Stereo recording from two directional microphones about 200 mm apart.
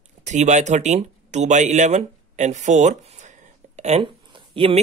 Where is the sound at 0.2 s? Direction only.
35° right (ahead or behind).